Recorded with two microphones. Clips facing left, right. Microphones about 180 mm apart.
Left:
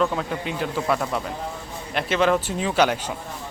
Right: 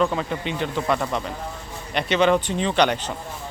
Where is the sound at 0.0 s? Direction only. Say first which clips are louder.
Right 1 dB; centre (ahead or behind).